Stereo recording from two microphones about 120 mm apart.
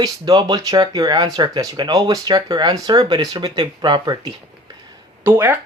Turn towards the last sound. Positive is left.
turn(degrees=-20)  # may be behind; listen again after turning